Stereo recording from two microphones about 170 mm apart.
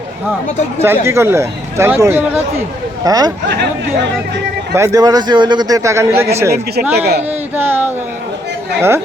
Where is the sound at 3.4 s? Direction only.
75° right (ahead or behind).